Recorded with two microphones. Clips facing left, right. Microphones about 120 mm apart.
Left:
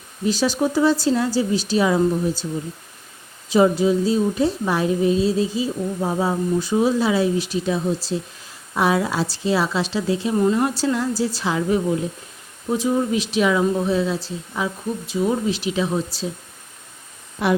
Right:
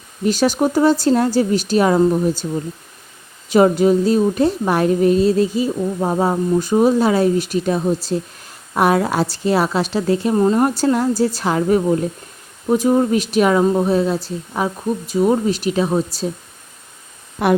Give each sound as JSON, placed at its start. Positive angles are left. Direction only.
{"t": 0.3, "sound": "a woman's voice", "side_deg": -60}
{"t": 3.5, "sound": "a woman's voice", "side_deg": -60}
{"t": 10.3, "sound": "a woman's voice", "side_deg": -40}
{"t": 17.4, "sound": "a woman's voice", "side_deg": -55}